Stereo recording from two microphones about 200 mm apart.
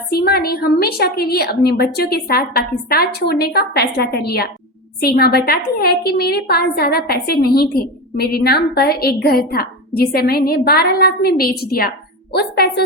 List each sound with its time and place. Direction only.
0.1 s a woman's voice: 50° left (ahead or behind)